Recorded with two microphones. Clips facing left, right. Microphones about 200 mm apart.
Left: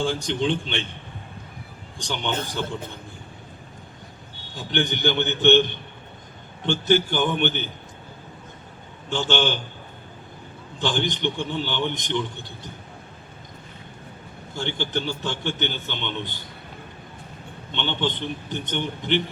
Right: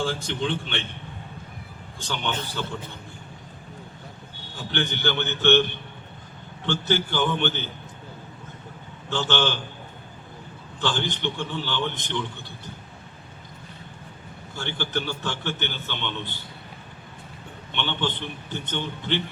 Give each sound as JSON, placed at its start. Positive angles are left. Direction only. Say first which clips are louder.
{"t": 0.0, "sound": "a man's voice", "louder": "left 3 dB", "side_deg": 15}
{"t": 2.0, "sound": "a man's voice", "louder": "left 2 dB", "side_deg": 15}
{"t": 4.7, "sound": "a man's voice", "louder": "left 3 dB", "side_deg": 15}
{"t": 6.7, "sound": "a man's voice", "louder": "left 4 dB", "side_deg": 15}
{"t": 9.0, "sound": "a man's voice", "louder": "left 2 dB", "side_deg": 15}
{"t": 10.8, "sound": "a man's voice", "louder": "left 2 dB", "side_deg": 15}
{"t": 14.5, "sound": "a man's voice", "louder": "left 2 dB", "side_deg": 15}
{"t": 17.7, "sound": "a man's voice", "louder": "left 2 dB", "side_deg": 15}